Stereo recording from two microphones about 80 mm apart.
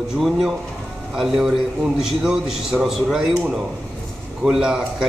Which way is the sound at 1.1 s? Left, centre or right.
Centre.